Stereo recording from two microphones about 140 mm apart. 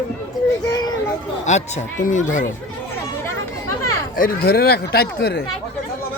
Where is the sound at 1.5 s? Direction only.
55° left (ahead or behind).